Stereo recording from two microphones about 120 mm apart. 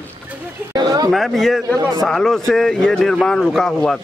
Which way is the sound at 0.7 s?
35° right (ahead or behind).